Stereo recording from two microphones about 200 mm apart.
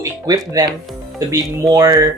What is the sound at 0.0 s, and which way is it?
Speech, 15° right (ahead or behind).